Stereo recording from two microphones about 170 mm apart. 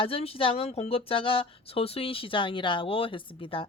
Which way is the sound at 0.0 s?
35° left (ahead or behind).